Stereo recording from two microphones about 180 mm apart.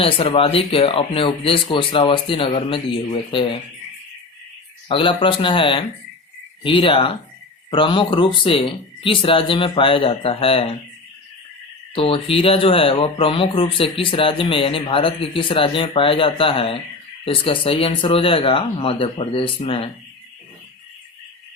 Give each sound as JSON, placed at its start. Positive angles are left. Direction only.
{"t": 0.0, "sound": "speech", "side_deg": 30}
{"t": 4.9, "sound": "speech", "side_deg": 30}
{"t": 11.9, "sound": "speech", "side_deg": 30}